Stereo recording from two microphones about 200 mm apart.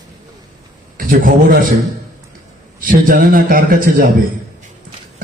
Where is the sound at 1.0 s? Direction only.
45° right (ahead or behind).